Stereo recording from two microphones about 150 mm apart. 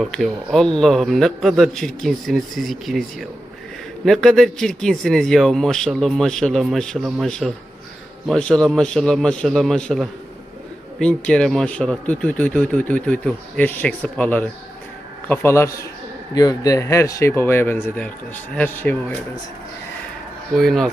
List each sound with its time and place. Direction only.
0.0 s speech: centre (ahead or behind)
20.6 s speech: centre (ahead or behind)